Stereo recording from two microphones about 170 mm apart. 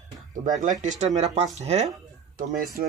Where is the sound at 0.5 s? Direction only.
50° right (ahead or behind).